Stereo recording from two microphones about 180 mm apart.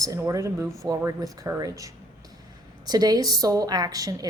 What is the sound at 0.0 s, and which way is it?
A woman's voice, 20° right (ahead or behind).